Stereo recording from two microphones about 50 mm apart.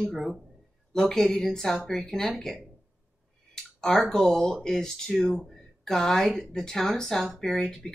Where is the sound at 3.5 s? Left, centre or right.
Centre.